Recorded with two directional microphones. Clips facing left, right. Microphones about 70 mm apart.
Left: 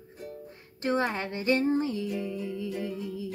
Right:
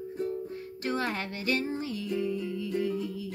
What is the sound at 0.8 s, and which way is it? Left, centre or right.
Female singing, left.